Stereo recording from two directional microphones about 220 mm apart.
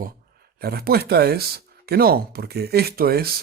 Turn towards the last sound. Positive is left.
turn(degrees=-45)  # may be behind; listen again after turning